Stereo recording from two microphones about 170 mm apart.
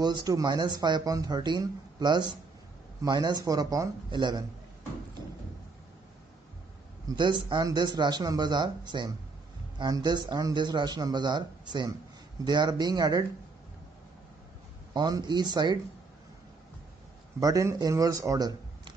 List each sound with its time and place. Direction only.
0.0 s speech: 25° right (ahead or behind)
7.1 s speech: 25° right (ahead or behind)
15.0 s speech: 25° right (ahead or behind)
17.4 s speech: 20° right (ahead or behind)